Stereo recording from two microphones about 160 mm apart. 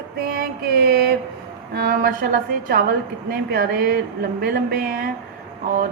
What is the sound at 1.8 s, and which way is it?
A woman's voice, 65° right (ahead or behind).